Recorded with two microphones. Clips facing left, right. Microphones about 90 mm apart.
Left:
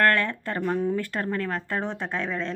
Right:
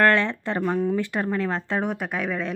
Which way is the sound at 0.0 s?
20° right (ahead or behind).